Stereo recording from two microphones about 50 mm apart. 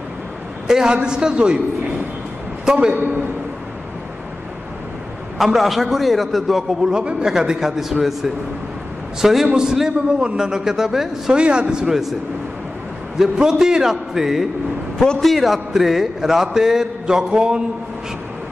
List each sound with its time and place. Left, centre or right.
0.7 s a man's voice: centre
2.6 s a man's voice: centre
5.4 s a man's voice: centre
6.9 s a man's voice: centre
11.3 s a man's voice: right; by 12.2 s centre
13.2 s a man's voice: centre
15.0 s a man's voice: centre